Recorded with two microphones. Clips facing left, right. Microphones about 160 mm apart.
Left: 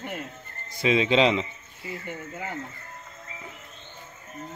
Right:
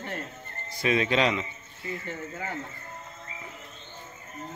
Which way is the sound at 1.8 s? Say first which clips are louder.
Right 1 dB; 10° left (ahead or behind).